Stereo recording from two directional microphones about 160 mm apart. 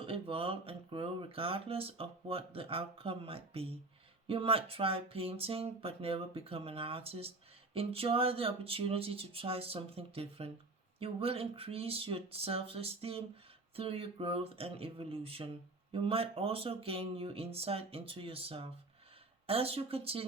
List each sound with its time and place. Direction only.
0.0 s speech: 35° right (ahead or behind)